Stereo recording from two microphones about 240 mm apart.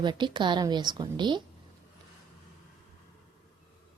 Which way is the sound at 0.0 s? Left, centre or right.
Centre.